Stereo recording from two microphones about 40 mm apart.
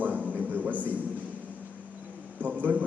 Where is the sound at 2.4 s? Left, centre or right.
Right.